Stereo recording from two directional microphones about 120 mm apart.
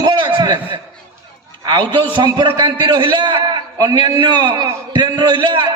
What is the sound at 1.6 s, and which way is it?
A man's voice, 35° right (ahead or behind).